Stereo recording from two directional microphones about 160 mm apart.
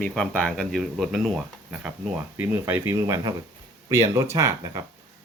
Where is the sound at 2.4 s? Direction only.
15° right (ahead or behind).